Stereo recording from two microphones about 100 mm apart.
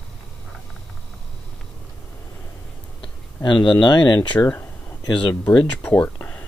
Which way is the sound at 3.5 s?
50° left (ahead or behind).